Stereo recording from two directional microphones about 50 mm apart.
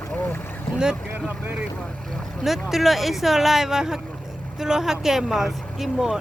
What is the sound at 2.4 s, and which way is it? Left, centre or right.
Speech, centre.